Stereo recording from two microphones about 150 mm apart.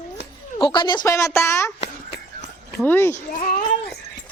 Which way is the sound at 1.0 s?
20° left (ahead or behind).